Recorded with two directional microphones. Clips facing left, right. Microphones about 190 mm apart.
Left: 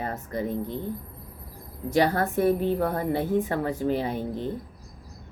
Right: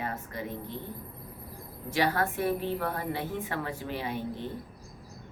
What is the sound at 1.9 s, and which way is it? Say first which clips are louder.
A woman's voice: left 5 dB; 50° left (ahead or behind).